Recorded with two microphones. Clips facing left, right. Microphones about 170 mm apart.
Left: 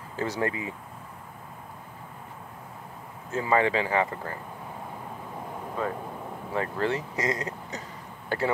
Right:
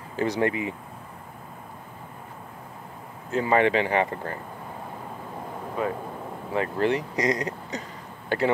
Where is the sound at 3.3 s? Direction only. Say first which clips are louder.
Right 3 dB; 20° right (ahead or behind).